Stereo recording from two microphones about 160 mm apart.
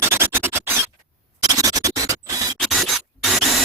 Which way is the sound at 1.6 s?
20° right (ahead or behind).